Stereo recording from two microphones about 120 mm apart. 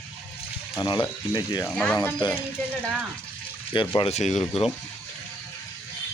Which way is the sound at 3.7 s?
40° left (ahead or behind).